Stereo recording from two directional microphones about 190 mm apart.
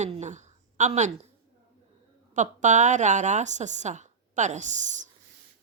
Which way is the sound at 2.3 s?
40° right (ahead or behind).